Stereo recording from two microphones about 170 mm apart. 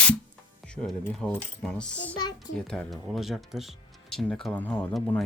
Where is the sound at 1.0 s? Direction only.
5° left (ahead or behind).